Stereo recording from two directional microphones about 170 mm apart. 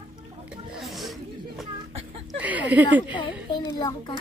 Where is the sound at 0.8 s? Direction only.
Centre (ahead or behind).